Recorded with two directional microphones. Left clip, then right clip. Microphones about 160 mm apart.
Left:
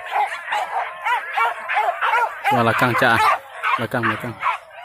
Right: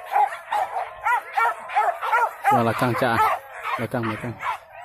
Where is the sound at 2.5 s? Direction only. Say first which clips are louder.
Left 7 dB; 5° right (ahead or behind).